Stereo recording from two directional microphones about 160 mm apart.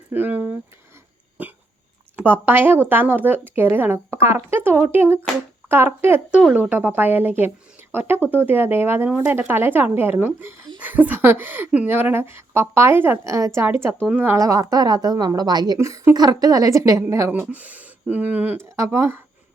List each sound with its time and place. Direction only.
0.1 s a woman's voice: 10° right (ahead or behind)
2.1 s a woman's voice: 15° right (ahead or behind)